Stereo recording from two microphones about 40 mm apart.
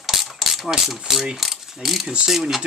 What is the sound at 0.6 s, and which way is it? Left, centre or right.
Mechanisms, centre.